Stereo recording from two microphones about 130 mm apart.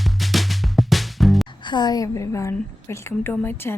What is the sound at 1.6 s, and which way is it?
A woman's voice, 35° left (ahead or behind).